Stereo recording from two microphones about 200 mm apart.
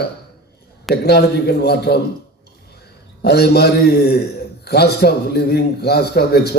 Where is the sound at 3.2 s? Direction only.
55° left (ahead or behind).